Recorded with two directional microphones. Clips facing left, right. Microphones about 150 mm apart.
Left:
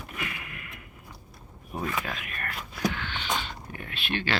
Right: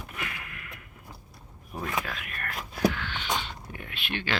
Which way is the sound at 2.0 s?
Centre (ahead or behind).